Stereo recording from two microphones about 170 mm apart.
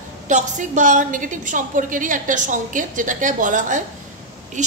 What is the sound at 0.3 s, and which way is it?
A woman's voice, 45° right (ahead or behind).